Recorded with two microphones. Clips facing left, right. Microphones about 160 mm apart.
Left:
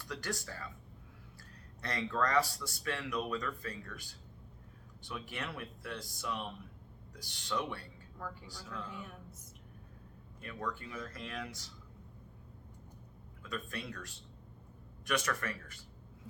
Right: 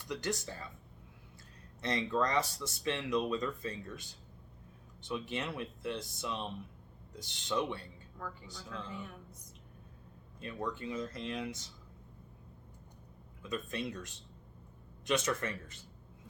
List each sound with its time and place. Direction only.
0.0 s speech: 20° right (ahead or behind)
1.8 s speech: 20° right (ahead or behind)
5.0 s speech: 20° right (ahead or behind)
8.9 s a woman's voice: 5° left (ahead or behind)
10.4 s speech: 20° right (ahead or behind)
13.4 s speech: 20° right (ahead or behind)